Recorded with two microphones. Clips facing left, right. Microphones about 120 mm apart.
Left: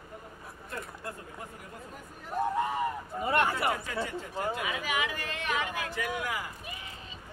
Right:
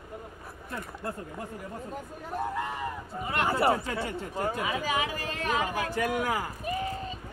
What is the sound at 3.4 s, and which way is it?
Speech, 35° right (ahead or behind).